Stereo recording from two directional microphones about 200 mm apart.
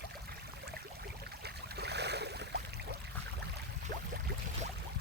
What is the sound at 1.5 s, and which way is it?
Boat, 55° right (ahead or behind).